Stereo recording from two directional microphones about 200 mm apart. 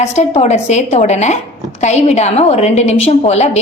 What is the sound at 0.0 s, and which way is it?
A woman's voice, 35° left (ahead or behind).